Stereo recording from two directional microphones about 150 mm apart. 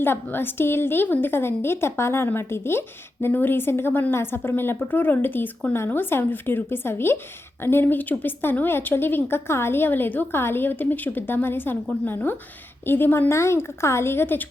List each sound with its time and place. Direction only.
0.0 s a woman's voice: 15° left (ahead or behind)